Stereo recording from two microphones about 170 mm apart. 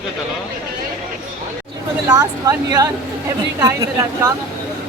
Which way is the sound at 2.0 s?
20° right (ahead or behind).